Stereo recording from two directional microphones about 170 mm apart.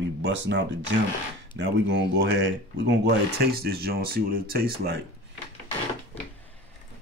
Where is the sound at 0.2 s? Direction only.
90° right.